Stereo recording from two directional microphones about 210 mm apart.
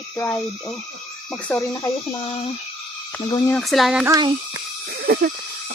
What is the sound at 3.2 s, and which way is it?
Speech, 15° left (ahead or behind).